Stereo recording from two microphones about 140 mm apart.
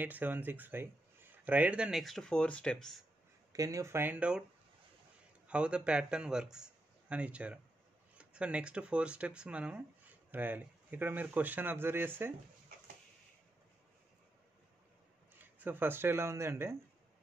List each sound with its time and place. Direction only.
0.0 s speech: 15° right (ahead or behind); by 3.1 s 5° left (ahead or behind)
3.5 s speech: 25° right (ahead or behind); by 4.5 s 5° right (ahead or behind)
5.5 s a man's voice: 5° right (ahead or behind)
15.3 s speech: 15° right (ahead or behind)